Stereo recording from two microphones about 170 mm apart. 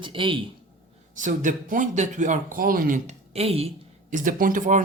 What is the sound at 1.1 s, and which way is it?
Speech, 50° right (ahead or behind).